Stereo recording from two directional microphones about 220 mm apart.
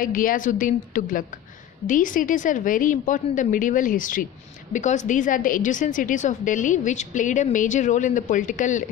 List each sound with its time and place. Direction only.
0.0 s a woman's voice: 40° left (ahead or behind)